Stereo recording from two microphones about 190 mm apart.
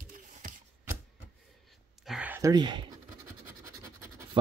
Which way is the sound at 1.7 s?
5° right (ahead or behind).